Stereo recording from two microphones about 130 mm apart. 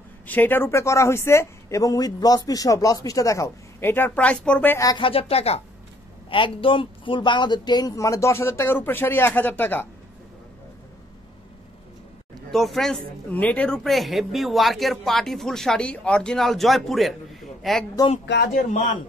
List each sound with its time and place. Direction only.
0.3 s speech: 15° left (ahead or behind)
4.7 s speech: 30° left (ahead or behind)
5.0 s speech: 50° left (ahead or behind); by 9.8 s 15° left (ahead or behind)
12.4 s speech: centre (ahead or behind)
13.8 s speech: centre (ahead or behind)
18.1 s a man's voice: 65° left (ahead or behind)